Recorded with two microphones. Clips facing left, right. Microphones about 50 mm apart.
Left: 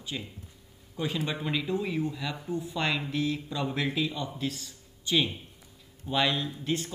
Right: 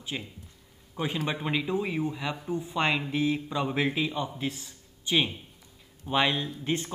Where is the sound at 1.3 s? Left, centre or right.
Centre.